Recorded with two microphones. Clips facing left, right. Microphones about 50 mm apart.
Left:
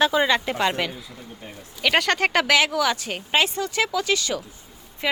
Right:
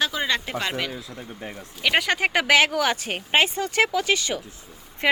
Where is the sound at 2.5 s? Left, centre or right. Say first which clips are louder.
Right 1 dB; right.